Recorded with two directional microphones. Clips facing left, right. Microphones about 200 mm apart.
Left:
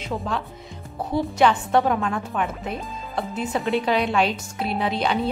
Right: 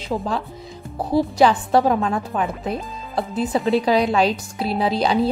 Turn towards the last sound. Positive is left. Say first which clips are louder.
# right 4 dB
turn(degrees=-35)  # may be behind; listen again after turning